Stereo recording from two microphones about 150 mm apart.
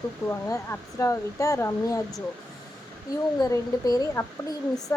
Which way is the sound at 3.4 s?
25° left (ahead or behind).